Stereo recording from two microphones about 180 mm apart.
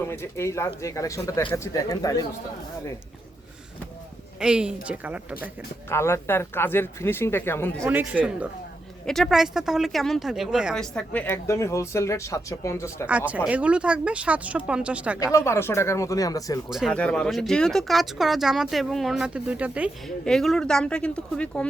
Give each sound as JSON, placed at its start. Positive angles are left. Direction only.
{"t": 0.1, "sound": "a man's voice", "side_deg": 15}
{"t": 4.4, "sound": "speech", "side_deg": -5}
{"t": 5.9, "sound": "speech", "side_deg": 15}
{"t": 7.9, "sound": "speech", "side_deg": -10}
{"t": 13.1, "sound": "speech", "side_deg": -10}
{"t": 15.3, "sound": "speech", "side_deg": 15}
{"t": 16.6, "sound": "speech", "side_deg": -5}